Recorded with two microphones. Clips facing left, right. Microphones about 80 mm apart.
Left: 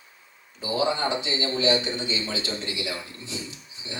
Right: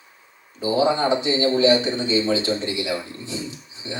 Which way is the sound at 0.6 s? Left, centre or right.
Right.